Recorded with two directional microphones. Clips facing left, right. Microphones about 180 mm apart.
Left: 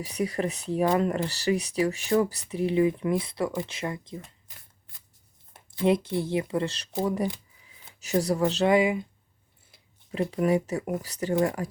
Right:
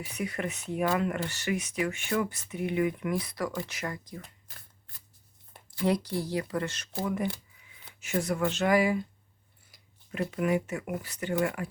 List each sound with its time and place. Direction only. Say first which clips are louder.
0.0 s speech: left 5 dB; 35° left (ahead or behind)